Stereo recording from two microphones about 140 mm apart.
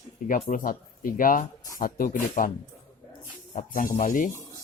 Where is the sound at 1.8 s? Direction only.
90° left.